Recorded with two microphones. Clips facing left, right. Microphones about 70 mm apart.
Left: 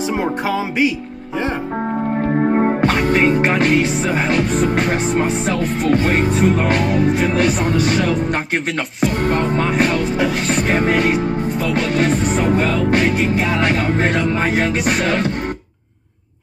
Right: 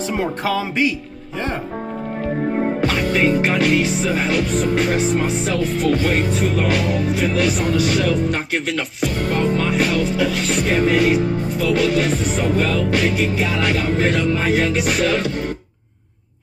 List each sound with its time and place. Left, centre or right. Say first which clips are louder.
0.2 s music: left 1 dB; centre
2.3 s music: left 4 dB; left
9.0 s music: left 3 dB; left